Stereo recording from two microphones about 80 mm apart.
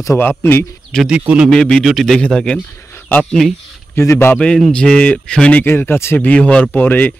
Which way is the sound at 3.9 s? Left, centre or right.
Left.